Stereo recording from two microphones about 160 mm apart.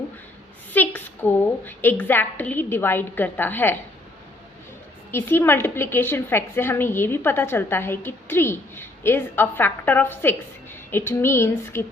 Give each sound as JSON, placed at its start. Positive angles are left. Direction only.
{"t": 0.7, "sound": "a woman's voice", "side_deg": 10}
{"t": 5.1, "sound": "a woman's voice", "side_deg": 15}